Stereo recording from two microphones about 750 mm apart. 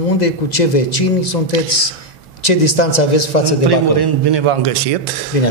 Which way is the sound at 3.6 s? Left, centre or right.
Right.